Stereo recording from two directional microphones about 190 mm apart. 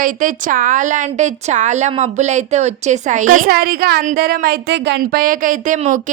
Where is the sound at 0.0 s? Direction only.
45° right (ahead or behind).